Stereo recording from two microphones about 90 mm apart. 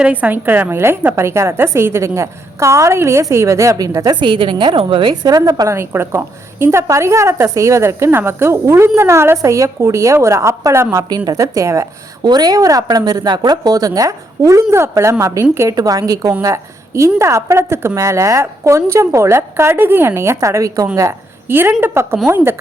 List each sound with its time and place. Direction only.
0.0 s a woman's voice: 15° right (ahead or behind); by 4.2 s 45° right (ahead or behind)
4.2 s a woman's voice: 70° right (ahead or behind)
5.2 s a woman's voice: 45° right (ahead or behind)
5.7 s a woman's voice: 30° right (ahead or behind)
12.2 s a woman's voice: 50° right (ahead or behind)
21.5 s a woman's voice: 25° right (ahead or behind)